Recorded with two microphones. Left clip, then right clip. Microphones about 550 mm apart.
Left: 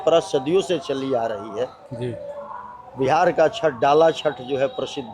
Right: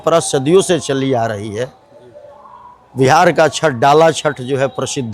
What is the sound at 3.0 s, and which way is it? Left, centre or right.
A man's voice, right.